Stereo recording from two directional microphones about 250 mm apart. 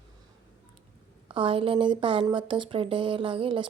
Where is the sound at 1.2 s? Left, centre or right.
Right.